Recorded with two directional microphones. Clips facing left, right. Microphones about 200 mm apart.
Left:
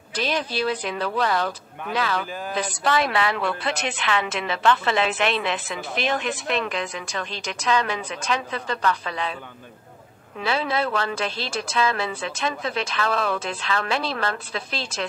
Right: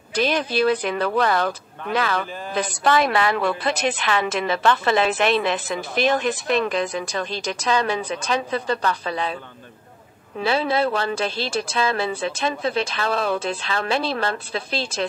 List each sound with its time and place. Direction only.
0.1 s speech: 50° right (ahead or behind); by 9.4 s 35° right (ahead or behind)
10.4 s speech: 30° right (ahead or behind)